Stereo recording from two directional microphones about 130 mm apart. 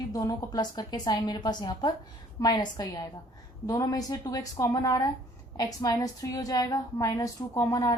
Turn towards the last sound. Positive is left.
turn(degrees=25)  # may be behind; listen again after turning